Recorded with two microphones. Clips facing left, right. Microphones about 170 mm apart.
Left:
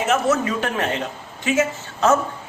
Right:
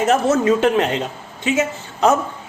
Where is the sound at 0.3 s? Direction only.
25° right (ahead or behind).